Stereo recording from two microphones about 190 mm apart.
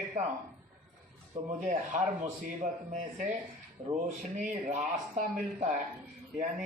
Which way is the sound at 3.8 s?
25° right (ahead or behind).